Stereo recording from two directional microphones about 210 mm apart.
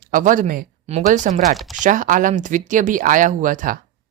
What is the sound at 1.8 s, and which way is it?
Speech, 40° right (ahead or behind).